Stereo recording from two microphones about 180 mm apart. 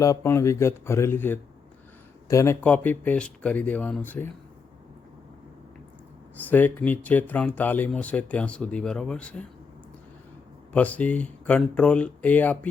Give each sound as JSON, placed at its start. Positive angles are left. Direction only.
{"t": 0.0, "sound": "speech", "side_deg": 15}
{"t": 6.5, "sound": "speech", "side_deg": 10}
{"t": 10.7, "sound": "speech", "side_deg": 10}